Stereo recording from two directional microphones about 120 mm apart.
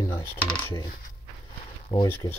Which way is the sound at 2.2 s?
35° left (ahead or behind).